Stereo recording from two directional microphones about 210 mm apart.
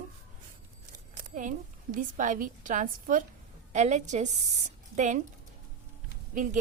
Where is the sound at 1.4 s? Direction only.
40° right (ahead or behind).